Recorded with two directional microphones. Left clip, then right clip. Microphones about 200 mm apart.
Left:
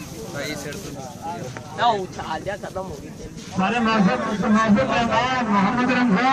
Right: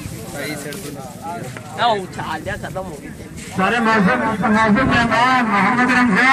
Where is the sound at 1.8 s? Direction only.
40° right (ahead or behind).